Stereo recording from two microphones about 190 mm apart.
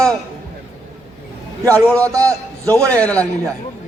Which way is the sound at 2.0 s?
15° right (ahead or behind).